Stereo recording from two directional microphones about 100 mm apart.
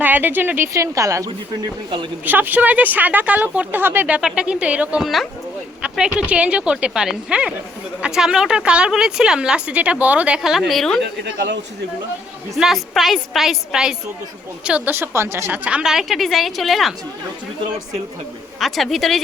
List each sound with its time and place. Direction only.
0.0 s speech: 20° right (ahead or behind); by 1.3 s 35° right (ahead or behind)
2.2 s a woman's voice: 20° right (ahead or behind)
5.0 s a woman's voice: centre (ahead or behind)
12.5 s a woman's voice: centre (ahead or behind)
14.9 s a woman's voice: 25° right (ahead or behind); by 16.9 s centre (ahead or behind)
18.6 s a woman's voice: centre (ahead or behind)